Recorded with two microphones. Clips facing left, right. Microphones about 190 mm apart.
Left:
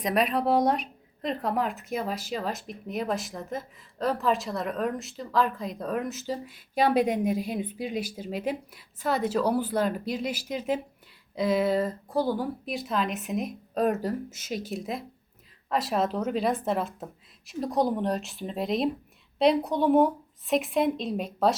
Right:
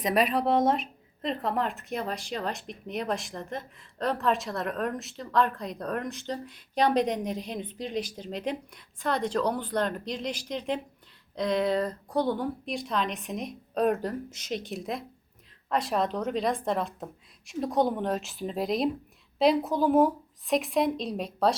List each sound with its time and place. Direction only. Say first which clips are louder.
0.0 s speech: even; centre (ahead or behind)